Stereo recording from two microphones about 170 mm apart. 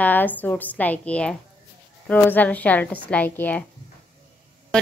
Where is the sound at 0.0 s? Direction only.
10° left (ahead or behind).